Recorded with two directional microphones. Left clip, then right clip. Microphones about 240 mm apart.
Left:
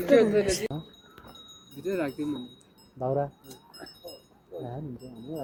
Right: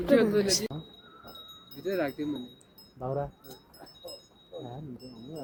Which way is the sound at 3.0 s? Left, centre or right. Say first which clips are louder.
Left 5 dB; left.